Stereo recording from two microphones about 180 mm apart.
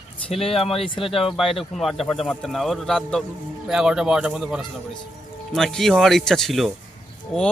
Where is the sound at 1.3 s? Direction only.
Centre (ahead or behind).